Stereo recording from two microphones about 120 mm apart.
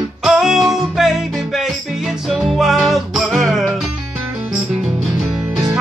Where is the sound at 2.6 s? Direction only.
Centre (ahead or behind).